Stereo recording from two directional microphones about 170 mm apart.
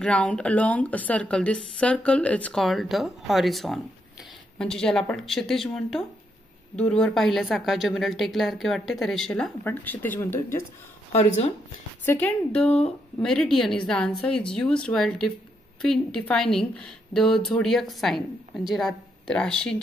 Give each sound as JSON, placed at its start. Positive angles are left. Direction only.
{"t": 0.0, "sound": "a woman's voice", "side_deg": 5}
{"t": 11.1, "sound": "a woman's voice", "side_deg": 40}
{"t": 12.0, "sound": "a woman's voice", "side_deg": 10}